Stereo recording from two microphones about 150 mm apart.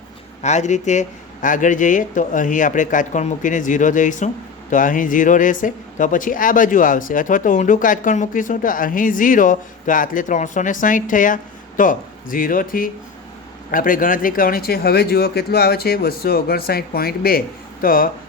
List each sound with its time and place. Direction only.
0.4 s speech: 50° left (ahead or behind); by 17.4 s 80° left
17.8 s speech: 70° left (ahead or behind)